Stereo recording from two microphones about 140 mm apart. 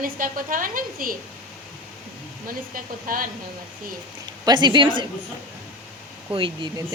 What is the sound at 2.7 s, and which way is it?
Speech, 75° right (ahead or behind).